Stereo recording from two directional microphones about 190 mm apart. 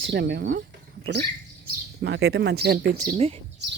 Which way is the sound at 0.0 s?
65° right (ahead or behind).